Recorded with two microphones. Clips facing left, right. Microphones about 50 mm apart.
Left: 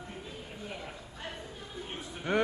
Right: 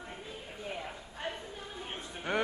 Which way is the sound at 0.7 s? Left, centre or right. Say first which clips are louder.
Right 2 dB; centre.